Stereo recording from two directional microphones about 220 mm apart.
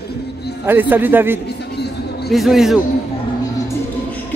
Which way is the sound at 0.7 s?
10° right (ahead or behind).